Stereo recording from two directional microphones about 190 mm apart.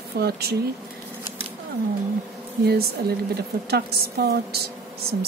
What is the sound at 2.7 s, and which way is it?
A woman's voice, 55° right (ahead or behind).